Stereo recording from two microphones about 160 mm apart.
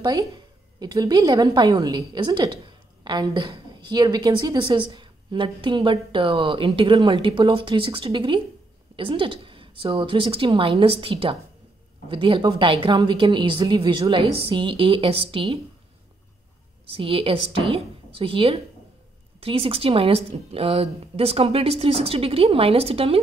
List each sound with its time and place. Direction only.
0.0 s a woman's voice: 25° right (ahead or behind)
16.8 s a woman's voice: 35° right (ahead or behind)